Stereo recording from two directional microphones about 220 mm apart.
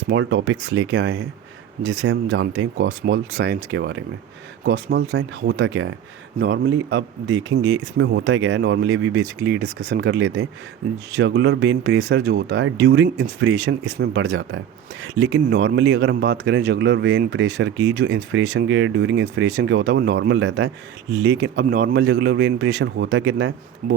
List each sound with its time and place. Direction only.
0.1 s a man's voice: 60° right (ahead or behind)